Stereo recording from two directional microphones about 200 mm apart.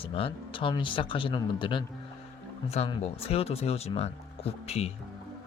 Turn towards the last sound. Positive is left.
turn(degrees=30)  # may be behind; listen again after turning